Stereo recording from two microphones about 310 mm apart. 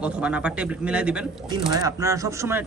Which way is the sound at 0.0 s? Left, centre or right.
Centre.